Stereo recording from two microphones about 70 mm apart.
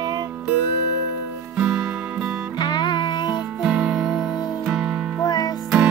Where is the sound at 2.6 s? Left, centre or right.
Left.